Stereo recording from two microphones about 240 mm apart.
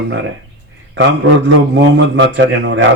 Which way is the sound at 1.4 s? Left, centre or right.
Right.